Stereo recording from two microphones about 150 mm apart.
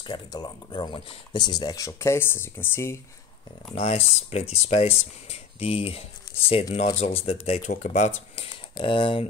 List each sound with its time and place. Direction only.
0.0 s speech: 25° left (ahead or behind)
3.7 s speech: 40° left (ahead or behind)
8.7 s speech: 35° left (ahead or behind)